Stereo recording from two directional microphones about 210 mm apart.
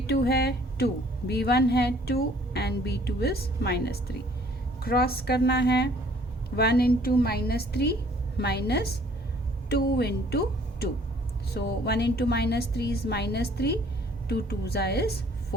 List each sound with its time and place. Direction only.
0.1 s a woman's voice: 50° left (ahead or behind)